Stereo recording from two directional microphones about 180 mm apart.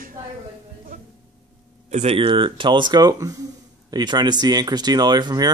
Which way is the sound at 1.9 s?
35° right (ahead or behind).